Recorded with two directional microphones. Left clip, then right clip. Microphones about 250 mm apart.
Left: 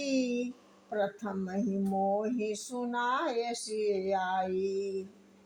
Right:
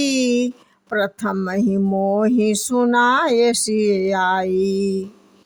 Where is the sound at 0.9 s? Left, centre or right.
Right.